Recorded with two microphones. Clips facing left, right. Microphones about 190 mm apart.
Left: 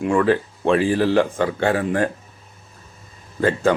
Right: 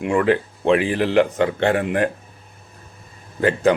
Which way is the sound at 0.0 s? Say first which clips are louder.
Even; 20° right (ahead or behind).